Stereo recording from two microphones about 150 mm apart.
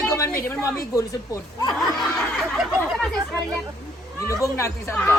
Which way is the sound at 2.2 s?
Centre (ahead or behind).